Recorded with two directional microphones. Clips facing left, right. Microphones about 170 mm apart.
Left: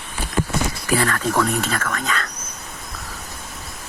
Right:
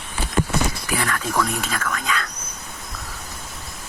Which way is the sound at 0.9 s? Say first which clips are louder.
Left 5 dB; 10° right (ahead or behind).